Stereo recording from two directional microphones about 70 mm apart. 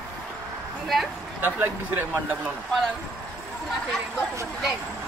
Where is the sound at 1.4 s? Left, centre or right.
Right.